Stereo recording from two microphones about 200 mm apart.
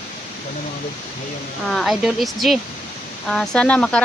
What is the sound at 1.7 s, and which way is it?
Speech, centre (ahead or behind).